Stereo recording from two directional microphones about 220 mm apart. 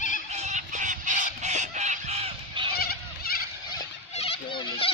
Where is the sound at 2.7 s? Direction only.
45° left (ahead or behind).